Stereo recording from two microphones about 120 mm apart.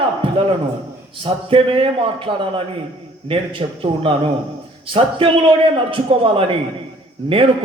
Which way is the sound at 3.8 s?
50° right (ahead or behind).